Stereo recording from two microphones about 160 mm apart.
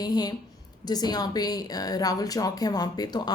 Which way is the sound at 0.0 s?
25° left (ahead or behind).